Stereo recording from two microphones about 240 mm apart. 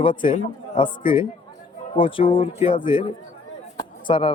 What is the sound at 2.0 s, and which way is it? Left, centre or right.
Speech, left.